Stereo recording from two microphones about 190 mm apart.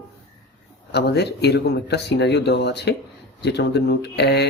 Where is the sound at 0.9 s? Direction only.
60° left (ahead or behind).